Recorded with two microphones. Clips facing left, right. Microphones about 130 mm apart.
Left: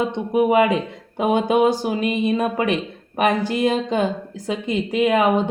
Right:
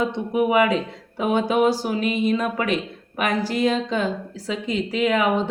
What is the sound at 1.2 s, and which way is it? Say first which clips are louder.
Speech: left 2 dB; 20° left (ahead or behind).